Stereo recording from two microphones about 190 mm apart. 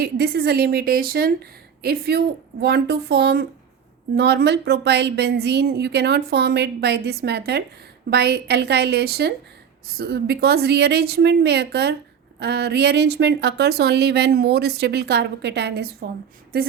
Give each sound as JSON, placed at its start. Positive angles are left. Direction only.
{"t": 0.0, "sound": "speech", "side_deg": -55}